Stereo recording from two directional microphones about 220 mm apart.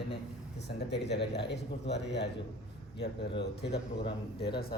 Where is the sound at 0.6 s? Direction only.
50° left (ahead or behind).